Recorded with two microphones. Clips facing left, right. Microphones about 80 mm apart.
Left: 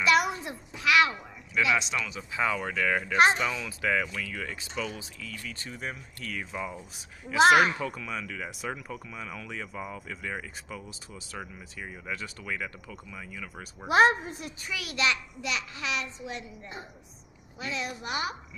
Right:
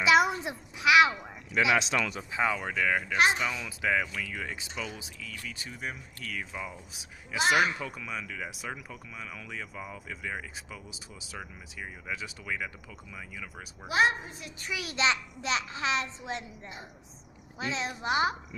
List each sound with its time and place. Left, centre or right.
0.0 s a sound: centre
1.6 s speech: right
2.3 s speech: centre
3.5 s speech: centre
3.8 s speech: centre
7.3 s speech: left
7.8 s speech: centre
13.8 s a woman's voice: left
14.7 s a child's voice: right
17.6 s a child's voice: right